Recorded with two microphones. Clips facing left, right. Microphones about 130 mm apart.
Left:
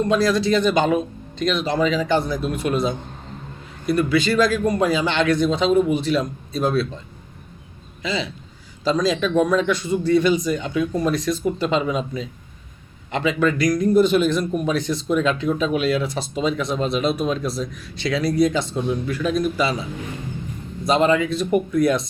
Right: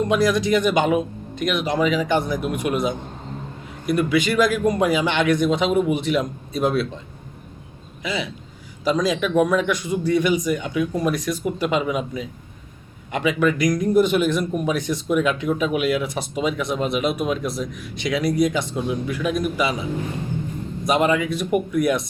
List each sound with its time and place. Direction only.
0.0 s a man's voice: 15° right (ahead or behind)
8.0 s a man's voice: 10° right (ahead or behind)
20.8 s a man's voice: 15° right (ahead or behind)